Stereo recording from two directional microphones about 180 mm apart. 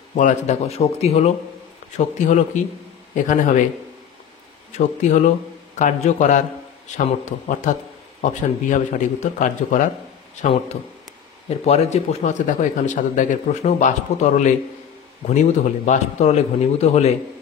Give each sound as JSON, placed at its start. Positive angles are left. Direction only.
{"t": 0.1, "sound": "a man's voice", "side_deg": 45}
{"t": 4.7, "sound": "a man's voice", "side_deg": 45}
{"t": 11.4, "sound": "speech", "side_deg": 35}